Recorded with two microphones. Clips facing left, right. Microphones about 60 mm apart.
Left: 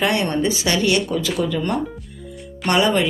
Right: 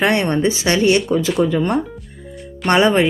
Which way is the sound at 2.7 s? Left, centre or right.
Right.